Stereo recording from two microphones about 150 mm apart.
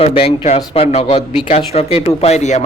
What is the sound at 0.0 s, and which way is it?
Speech, 40° left (ahead or behind).